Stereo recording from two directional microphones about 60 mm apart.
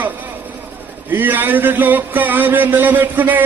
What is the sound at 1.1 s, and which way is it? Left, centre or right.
A man's voice, right.